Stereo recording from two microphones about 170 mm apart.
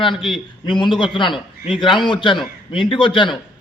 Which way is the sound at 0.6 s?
25° left (ahead or behind).